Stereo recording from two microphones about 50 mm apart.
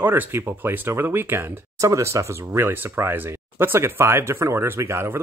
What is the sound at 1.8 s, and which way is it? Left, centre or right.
Speech, right.